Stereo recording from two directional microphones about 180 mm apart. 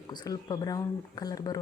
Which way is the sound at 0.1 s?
25° left (ahead or behind).